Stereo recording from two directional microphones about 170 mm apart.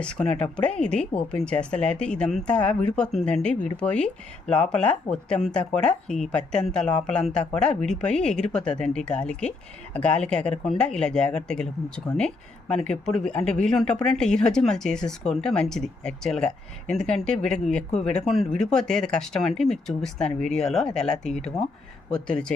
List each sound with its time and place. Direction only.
0.0 s speech: 5° left (ahead or behind)